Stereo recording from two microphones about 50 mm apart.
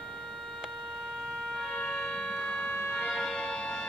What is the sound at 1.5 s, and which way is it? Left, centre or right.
Siren, centre.